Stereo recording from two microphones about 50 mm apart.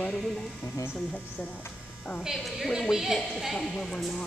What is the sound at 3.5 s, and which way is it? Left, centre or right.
Speech, centre.